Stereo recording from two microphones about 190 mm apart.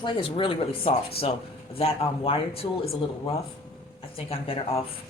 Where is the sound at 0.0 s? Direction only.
25° left (ahead or behind).